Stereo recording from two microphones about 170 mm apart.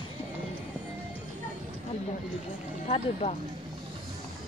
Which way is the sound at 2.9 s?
35° left (ahead or behind).